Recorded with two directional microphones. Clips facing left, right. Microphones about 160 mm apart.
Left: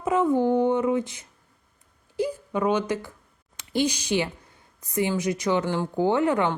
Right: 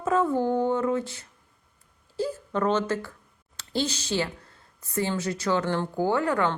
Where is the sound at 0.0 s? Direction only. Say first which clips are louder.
Left 2 dB; 15° left (ahead or behind).